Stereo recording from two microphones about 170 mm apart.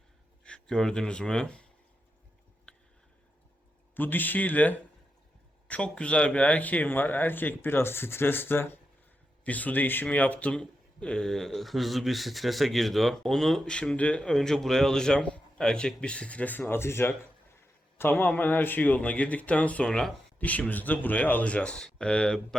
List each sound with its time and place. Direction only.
0.4 s speech: 5° left (ahead or behind)
3.9 s speech: 10° left (ahead or behind)